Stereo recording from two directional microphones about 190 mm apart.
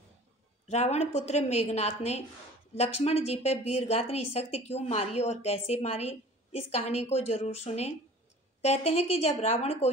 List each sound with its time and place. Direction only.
0.7 s a woman's voice: 35° left (ahead or behind)